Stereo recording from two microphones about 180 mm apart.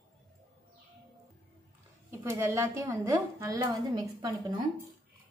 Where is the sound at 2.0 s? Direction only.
15° right (ahead or behind).